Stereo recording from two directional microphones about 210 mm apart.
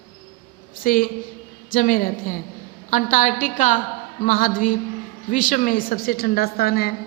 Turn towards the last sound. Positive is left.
turn(degrees=45)  # may be behind; listen again after turning